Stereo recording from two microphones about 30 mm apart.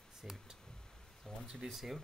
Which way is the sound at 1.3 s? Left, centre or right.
Centre.